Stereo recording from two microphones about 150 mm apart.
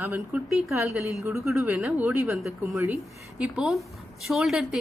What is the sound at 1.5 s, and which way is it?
Speech, 15° right (ahead or behind).